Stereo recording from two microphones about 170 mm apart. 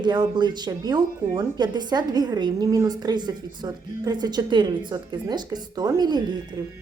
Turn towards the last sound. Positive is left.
turn(degrees=-20)  # may be behind; listen again after turning